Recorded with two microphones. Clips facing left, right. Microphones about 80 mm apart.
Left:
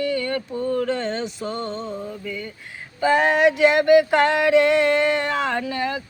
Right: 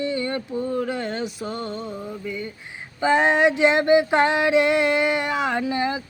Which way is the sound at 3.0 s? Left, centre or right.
Right.